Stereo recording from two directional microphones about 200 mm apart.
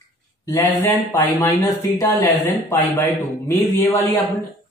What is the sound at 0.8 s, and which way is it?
Speech, 15° left (ahead or behind).